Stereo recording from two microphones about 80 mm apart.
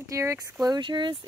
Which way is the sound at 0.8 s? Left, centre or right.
Right.